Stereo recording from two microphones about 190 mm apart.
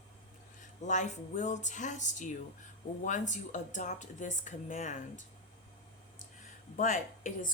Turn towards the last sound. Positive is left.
turn(degrees=45)  # may be behind; listen again after turning